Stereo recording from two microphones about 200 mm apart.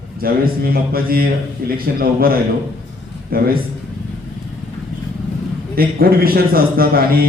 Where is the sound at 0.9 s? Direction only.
50° right (ahead or behind).